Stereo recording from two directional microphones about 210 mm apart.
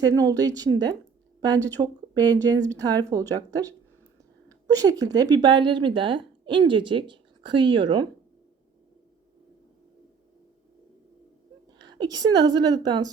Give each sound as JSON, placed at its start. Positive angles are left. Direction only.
{"t": 0.0, "sound": "a woman's voice", "side_deg": -20}
{"t": 11.8, "sound": "a woman's voice", "side_deg": -20}